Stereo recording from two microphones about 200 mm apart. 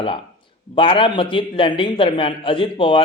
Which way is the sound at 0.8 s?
25° left (ahead or behind).